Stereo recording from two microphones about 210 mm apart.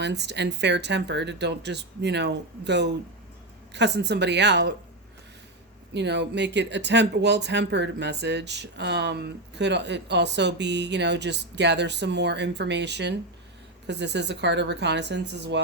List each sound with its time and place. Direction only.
0.0 s a woman's voice: 55° right (ahead or behind)
5.9 s speech: 55° right (ahead or behind)